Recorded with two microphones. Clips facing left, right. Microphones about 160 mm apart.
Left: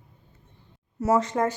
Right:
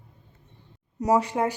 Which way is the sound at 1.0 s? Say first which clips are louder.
Even; 15° right (ahead or behind).